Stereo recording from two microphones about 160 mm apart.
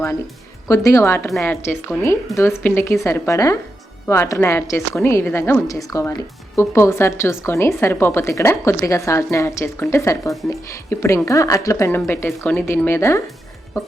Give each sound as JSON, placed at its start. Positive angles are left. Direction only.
{"t": 0.7, "sound": "a woman's voice", "side_deg": 20}